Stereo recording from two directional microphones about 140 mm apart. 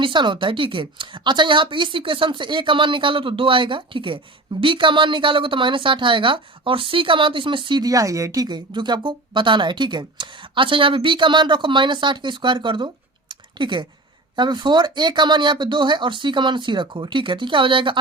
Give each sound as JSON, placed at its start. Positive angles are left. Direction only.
{"t": 0.0, "sound": "a woman's voice", "side_deg": -35}